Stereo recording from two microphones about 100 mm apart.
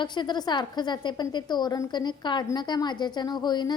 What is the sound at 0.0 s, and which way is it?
A woman's voice, 50° left (ahead or behind).